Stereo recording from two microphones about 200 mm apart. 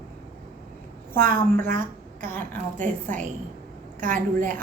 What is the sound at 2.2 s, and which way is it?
Speech, 10° left (ahead or behind).